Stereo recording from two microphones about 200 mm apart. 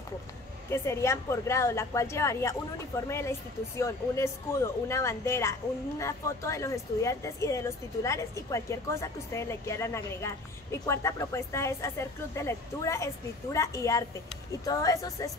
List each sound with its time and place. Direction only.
0.7 s a woman's voice: 15° left (ahead or behind)